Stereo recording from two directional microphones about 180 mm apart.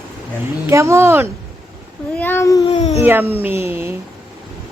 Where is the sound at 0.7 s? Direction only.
15° right (ahead or behind).